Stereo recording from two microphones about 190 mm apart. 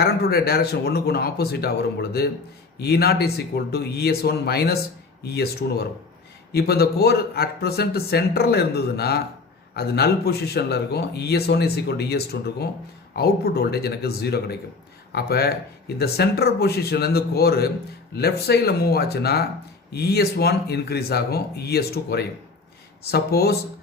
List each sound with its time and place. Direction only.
0.0 s speech: 55° left (ahead or behind)